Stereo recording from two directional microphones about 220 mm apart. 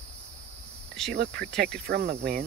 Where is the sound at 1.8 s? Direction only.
45° right (ahead or behind).